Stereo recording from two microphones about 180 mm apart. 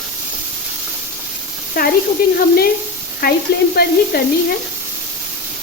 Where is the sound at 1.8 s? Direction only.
55° left (ahead or behind).